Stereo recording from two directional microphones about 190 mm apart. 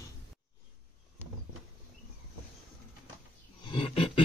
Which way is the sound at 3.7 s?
30° left (ahead or behind).